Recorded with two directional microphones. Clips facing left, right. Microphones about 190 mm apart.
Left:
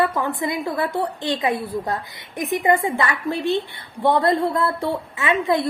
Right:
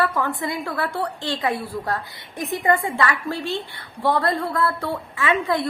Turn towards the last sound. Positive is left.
turn(degrees=20)  # may be behind; listen again after turning